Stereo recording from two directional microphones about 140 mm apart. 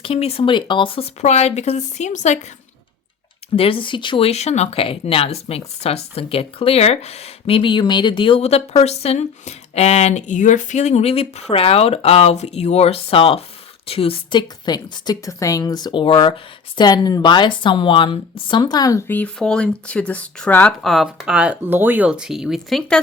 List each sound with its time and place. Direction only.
0.0 s speech: 45° left (ahead or behind)
3.5 s a woman's voice: 40° left (ahead or behind)
4.3 s speech: 50° left (ahead or behind); by 8.4 s 35° left (ahead or behind)
8.4 s a woman's voice: 50° left (ahead or behind); by 20.7 s 10° left (ahead or behind)
20.8 s speech: centre (ahead or behind)